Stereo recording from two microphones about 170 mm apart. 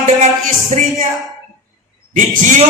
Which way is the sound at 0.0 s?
40° right (ahead or behind).